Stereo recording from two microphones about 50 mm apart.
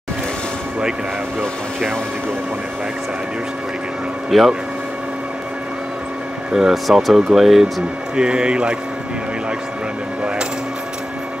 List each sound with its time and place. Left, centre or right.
4.3 s speech: centre
6.5 s speech: centre
8.2 s speech: centre